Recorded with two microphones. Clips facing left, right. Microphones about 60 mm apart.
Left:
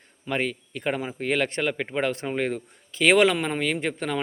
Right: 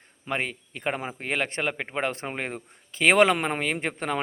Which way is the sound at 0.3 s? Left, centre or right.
Right.